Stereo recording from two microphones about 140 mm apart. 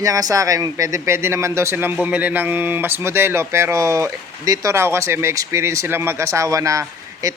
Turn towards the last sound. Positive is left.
turn(degrees=-25)  # may be behind; listen again after turning